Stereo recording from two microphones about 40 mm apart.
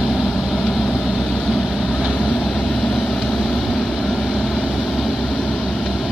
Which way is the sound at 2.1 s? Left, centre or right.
Left.